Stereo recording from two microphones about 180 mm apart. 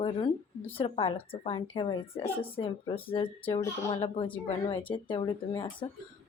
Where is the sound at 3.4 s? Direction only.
15° left (ahead or behind).